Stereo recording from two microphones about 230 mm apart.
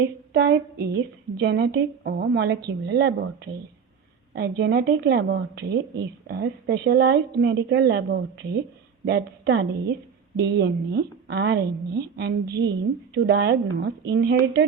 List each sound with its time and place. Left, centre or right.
0.3 s a woman's voice: right
4.4 s a woman's voice: right